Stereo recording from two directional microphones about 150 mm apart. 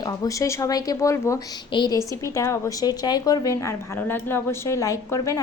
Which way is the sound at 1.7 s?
30° left (ahead or behind).